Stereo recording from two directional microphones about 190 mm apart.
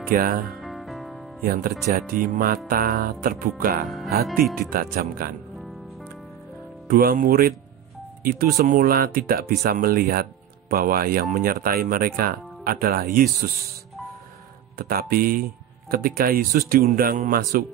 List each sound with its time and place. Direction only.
0.1 s speech: 50° right (ahead or behind)
0.5 s music: centre (ahead or behind)
1.4 s speech: 50° right (ahead or behind)
6.9 s speech: 50° right (ahead or behind)
14.8 s speech: 50° right (ahead or behind)